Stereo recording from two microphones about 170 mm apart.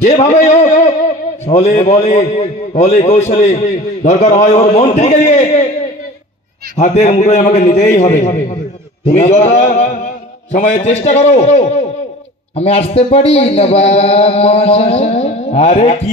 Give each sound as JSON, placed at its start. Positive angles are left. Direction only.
{"t": 0.0, "sound": "a man's voice", "side_deg": 40}
{"t": 6.8, "sound": "a man's voice", "side_deg": 45}